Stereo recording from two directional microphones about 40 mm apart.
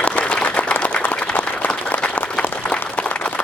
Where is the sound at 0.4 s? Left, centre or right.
Left.